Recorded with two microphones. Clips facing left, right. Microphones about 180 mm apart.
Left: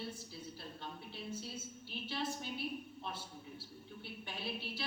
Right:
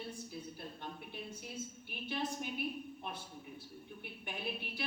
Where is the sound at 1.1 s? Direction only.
15° right (ahead or behind).